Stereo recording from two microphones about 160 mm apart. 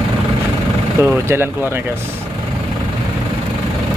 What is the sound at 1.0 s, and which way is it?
Speech, 15° right (ahead or behind).